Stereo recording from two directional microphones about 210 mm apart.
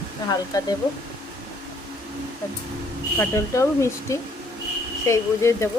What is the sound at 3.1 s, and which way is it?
Speech, 15° left (ahead or behind).